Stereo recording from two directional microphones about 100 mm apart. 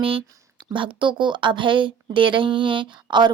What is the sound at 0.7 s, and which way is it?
A woman's voice, 55° right (ahead or behind).